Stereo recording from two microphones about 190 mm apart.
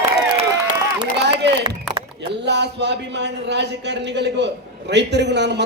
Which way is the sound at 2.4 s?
65° right (ahead or behind).